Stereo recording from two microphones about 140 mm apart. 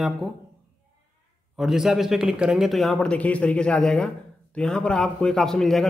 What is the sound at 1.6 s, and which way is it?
A man's voice, centre (ahead or behind).